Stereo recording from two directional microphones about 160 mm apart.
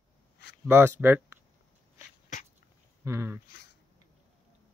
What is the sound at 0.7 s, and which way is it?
Speech, 15° right (ahead or behind).